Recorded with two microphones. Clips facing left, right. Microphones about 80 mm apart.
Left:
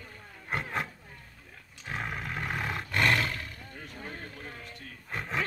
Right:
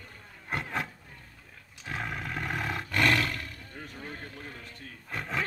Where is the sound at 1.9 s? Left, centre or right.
Centre.